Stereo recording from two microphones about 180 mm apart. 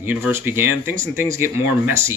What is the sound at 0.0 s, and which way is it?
Speech, 10° right (ahead or behind).